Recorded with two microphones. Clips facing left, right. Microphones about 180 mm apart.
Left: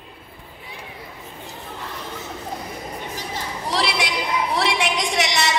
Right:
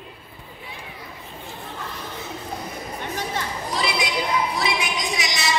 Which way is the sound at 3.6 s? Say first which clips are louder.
Left 3 dB; 75° left (ahead or behind).